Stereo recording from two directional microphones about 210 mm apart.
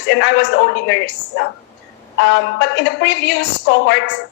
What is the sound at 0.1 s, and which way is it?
Speech, 60° left (ahead or behind).